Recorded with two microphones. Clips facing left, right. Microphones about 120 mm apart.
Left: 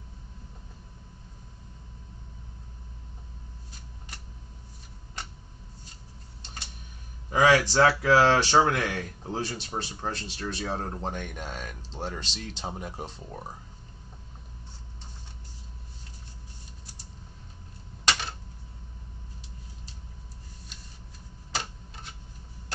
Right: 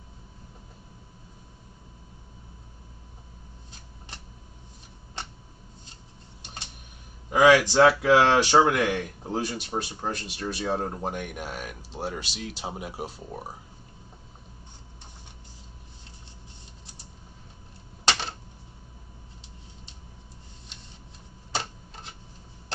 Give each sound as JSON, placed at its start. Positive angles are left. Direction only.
{"t": 7.2, "sound": "speech", "side_deg": -15}
{"t": 21.5, "sound": "typewriter", "side_deg": -30}